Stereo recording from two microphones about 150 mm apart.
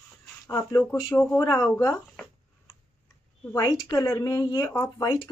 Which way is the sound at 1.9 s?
5° left (ahead or behind).